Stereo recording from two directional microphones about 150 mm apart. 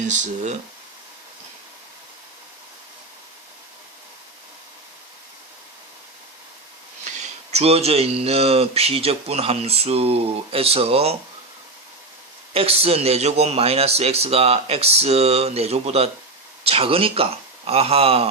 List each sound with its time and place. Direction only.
0.0 s speech: 55° right (ahead or behind)
7.5 s speech: 45° right (ahead or behind)
12.5 s speech: 40° right (ahead or behind)